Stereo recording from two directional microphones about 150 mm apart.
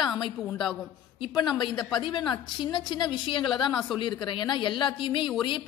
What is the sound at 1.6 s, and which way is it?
A woman's voice, 30° left (ahead or behind).